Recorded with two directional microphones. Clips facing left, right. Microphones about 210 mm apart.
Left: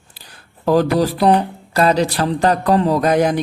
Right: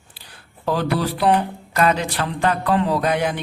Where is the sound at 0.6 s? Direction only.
40° left (ahead or behind).